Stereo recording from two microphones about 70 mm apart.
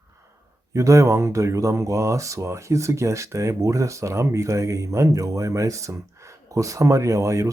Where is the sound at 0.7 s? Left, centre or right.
Right.